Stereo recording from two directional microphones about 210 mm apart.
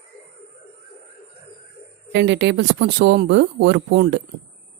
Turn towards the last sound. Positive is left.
turn(degrees=-50)  # may be behind; listen again after turning